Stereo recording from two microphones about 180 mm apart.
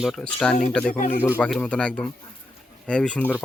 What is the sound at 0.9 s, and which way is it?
Speech, 40° left (ahead or behind).